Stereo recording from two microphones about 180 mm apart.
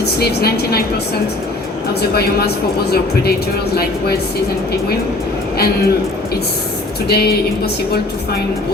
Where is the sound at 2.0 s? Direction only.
60° left (ahead or behind).